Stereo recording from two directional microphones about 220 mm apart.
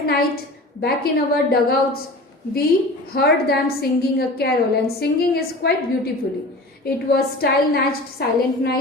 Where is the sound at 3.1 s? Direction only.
45° left (ahead or behind).